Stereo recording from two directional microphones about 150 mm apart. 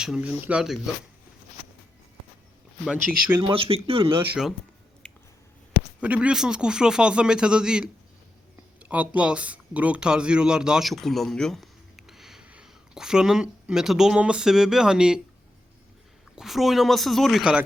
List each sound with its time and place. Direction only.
0.0 s speech: 5° right (ahead or behind)
3.4 s speech: 35° right (ahead or behind)
5.0 s a sound: 5° left (ahead or behind)
6.0 s a man's voice: 10° right (ahead or behind)
16.3 s a man's voice: centre (ahead or behind)